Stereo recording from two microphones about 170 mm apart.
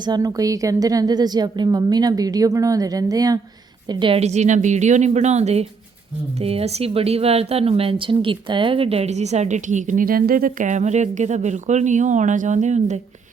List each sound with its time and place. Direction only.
0.0 s a woman's voice: 25° right (ahead or behind); by 13.0 s 45° right (ahead or behind)